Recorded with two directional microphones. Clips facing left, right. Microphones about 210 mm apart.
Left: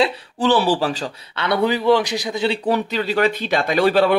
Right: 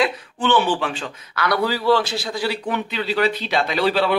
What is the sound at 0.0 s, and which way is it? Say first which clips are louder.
Speech: left 3 dB; 35° left (ahead or behind).